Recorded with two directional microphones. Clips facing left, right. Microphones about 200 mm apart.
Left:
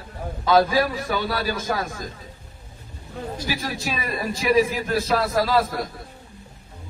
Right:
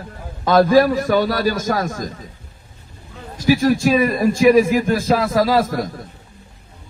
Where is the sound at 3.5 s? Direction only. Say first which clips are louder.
Right 17 dB; 45° right (ahead or behind).